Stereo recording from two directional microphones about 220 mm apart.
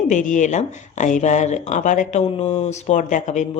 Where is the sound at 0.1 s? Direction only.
35° left (ahead or behind).